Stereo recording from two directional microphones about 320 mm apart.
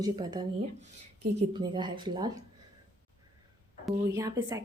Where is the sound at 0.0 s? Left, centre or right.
Centre.